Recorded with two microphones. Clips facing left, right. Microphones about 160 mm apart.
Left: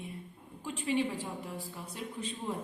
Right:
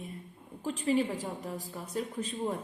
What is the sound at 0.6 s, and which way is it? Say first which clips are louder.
A woman's voice: right 3 dB; 40° right (ahead or behind).